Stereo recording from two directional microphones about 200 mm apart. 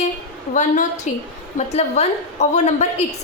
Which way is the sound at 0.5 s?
40° left (ahead or behind).